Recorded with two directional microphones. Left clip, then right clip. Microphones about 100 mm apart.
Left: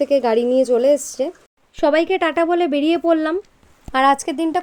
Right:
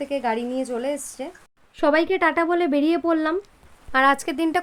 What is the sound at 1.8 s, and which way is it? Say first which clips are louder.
A woman's voice: left 3 dB; 40° left (ahead or behind).